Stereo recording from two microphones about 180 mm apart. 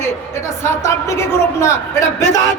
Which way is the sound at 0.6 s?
15° left (ahead or behind).